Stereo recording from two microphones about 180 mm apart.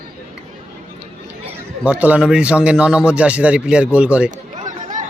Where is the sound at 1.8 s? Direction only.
5° right (ahead or behind).